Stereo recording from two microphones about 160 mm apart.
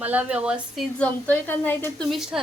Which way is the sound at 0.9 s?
10° left (ahead or behind).